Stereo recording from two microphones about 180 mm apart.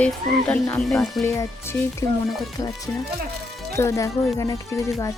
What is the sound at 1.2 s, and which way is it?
Speech, 15° left (ahead or behind).